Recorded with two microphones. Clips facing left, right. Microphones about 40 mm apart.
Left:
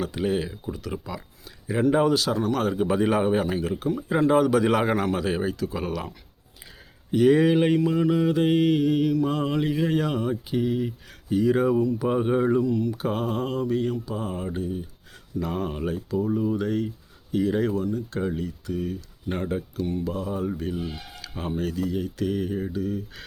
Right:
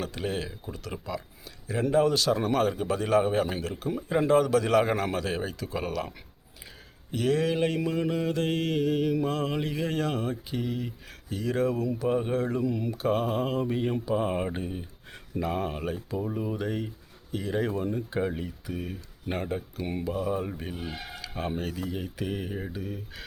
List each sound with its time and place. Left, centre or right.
0.0 s speech: centre
1.7 s a man's voice: centre
2.0 s speech: centre
2.7 s a man's voice: centre
7.1 s a man's voice: centre
7.9 s a man's voice: centre
12.6 s speech: centre
14.0 s speech: right
15.4 s speech: centre
17.9 s speech: centre